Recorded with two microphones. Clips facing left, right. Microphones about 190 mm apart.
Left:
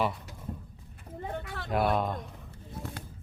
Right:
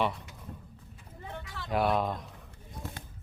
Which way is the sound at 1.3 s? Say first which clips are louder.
Left 3 dB; 55° left (ahead or behind).